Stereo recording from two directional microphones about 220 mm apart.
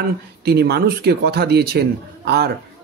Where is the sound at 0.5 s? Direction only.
45° right (ahead or behind).